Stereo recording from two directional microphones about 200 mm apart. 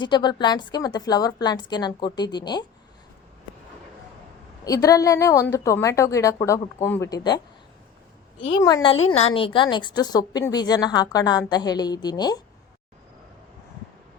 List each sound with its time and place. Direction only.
0.0 s a woman's voice: 20° left (ahead or behind)
4.6 s a woman's voice: 15° left (ahead or behind)